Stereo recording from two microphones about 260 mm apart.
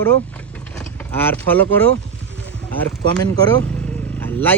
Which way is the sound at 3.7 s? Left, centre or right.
Centre.